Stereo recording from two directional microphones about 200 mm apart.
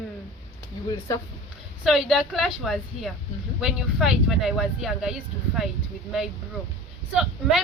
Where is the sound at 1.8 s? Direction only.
Centre (ahead or behind).